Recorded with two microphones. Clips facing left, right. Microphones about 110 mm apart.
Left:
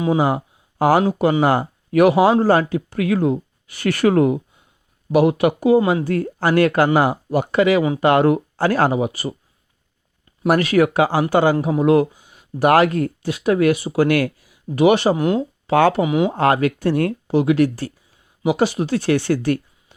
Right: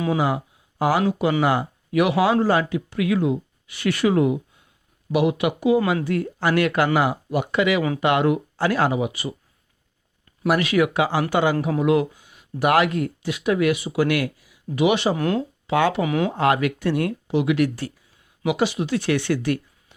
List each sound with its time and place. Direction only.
0.2 s speech: 45° left (ahead or behind)
10.4 s speech: 40° left (ahead or behind)
15.1 s speech: 20° left (ahead or behind)
15.6 s speech: 45° left (ahead or behind)
16.0 s speech: 20° left (ahead or behind)
16.3 s speech: 40° left (ahead or behind)